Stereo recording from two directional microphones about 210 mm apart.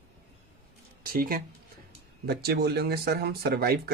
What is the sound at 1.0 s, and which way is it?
Speech, 45° right (ahead or behind).